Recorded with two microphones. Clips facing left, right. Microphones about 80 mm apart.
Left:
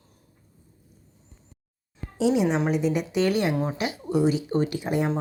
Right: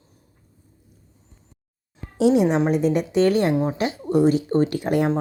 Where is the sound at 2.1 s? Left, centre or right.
Right.